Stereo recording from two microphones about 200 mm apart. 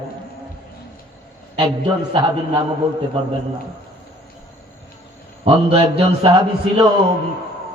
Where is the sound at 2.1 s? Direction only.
25° right (ahead or behind).